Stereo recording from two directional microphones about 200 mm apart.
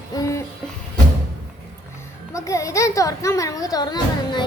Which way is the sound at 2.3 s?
15° left (ahead or behind).